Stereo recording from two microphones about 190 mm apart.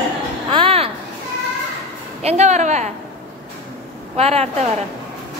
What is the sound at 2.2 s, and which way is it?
Speech, 35° right (ahead or behind).